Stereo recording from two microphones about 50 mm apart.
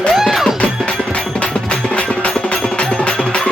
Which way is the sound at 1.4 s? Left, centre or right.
Left.